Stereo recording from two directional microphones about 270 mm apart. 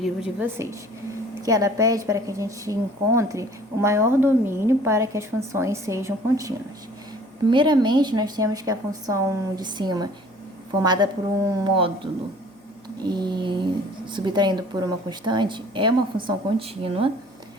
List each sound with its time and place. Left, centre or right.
0.0 s a woman's voice: centre
7.5 s a woman's voice: centre
13.0 s a woman's voice: centre